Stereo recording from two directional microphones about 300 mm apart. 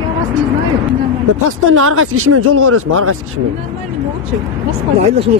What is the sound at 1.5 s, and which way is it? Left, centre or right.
Speech, right.